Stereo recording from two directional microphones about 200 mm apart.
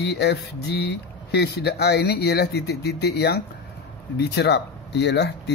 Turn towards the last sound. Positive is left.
turn(degrees=60)  # may be behind; listen again after turning